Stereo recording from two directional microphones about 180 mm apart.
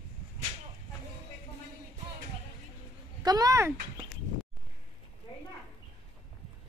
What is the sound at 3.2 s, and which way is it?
Speech, 20° right (ahead or behind).